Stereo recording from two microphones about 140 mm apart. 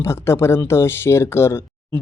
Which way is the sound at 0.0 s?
20° left (ahead or behind).